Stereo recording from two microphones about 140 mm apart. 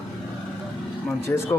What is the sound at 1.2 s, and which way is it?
Speech, 20° left (ahead or behind).